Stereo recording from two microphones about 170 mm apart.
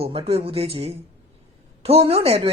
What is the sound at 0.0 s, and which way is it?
A woman's voice, 35° right (ahead or behind).